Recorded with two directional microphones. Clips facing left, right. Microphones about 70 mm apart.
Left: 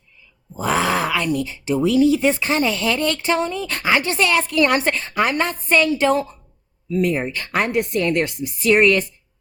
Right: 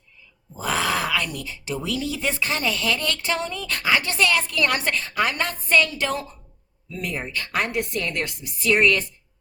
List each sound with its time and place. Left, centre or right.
0.6 s speech: left